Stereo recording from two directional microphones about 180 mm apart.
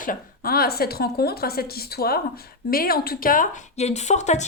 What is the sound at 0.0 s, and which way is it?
Speech, 50° left (ahead or behind).